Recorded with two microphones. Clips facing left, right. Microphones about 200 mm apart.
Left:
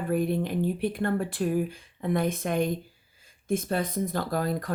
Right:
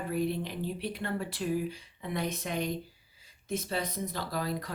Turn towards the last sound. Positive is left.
turn(degrees=50)  # may be behind; listen again after turning